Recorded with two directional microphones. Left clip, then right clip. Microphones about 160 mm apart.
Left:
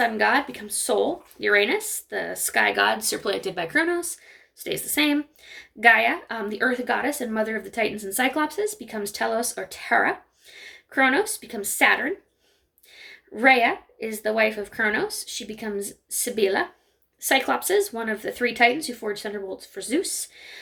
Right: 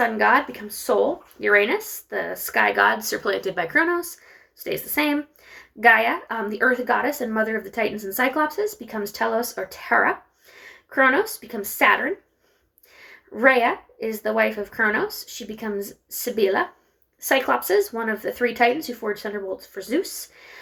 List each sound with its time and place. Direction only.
0.0 s a woman's voice: 35° left (ahead or behind)
3.6 s a woman's voice: 35° left (ahead or behind)